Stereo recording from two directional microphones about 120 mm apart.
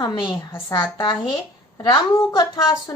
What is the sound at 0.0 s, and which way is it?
A woman's voice, 40° left (ahead or behind).